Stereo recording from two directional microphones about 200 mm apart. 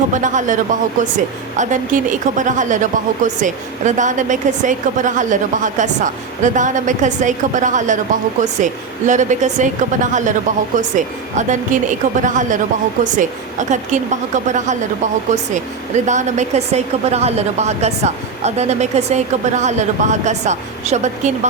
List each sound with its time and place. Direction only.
0.1 s a woman's voice: 40° right (ahead or behind)